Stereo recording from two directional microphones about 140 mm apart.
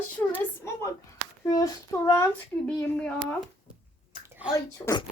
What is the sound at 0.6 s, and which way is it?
A child's voice, 20° left (ahead or behind).